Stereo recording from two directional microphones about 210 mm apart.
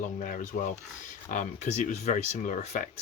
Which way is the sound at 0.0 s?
40° left (ahead or behind).